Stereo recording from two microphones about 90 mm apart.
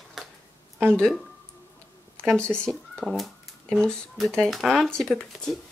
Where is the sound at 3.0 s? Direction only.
Centre (ahead or behind).